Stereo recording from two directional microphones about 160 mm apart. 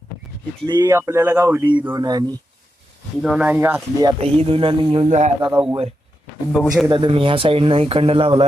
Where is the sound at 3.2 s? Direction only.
5° right (ahead or behind); by 4.2 s 25° right (ahead or behind).